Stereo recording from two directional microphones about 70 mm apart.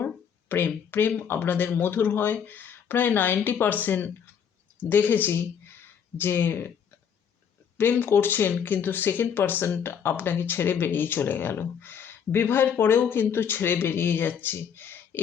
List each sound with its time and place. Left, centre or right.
0.0 s a sound: left
1.3 s speech: left
7.8 s speech: left